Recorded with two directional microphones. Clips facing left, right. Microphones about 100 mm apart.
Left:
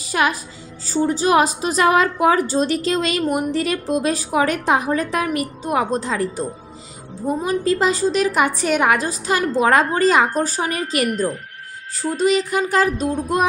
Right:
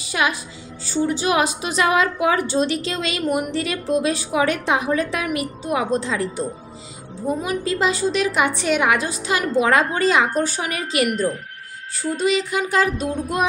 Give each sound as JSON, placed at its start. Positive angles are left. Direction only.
{"t": 0.0, "sound": "a woman's voice", "side_deg": 40}
{"t": 12.3, "sound": "a woman's voice", "side_deg": 40}